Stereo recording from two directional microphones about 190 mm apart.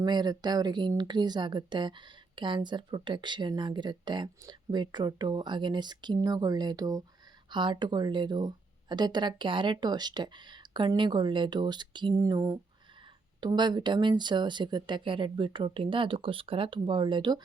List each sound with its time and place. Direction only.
0.0 s speech: 20° right (ahead or behind)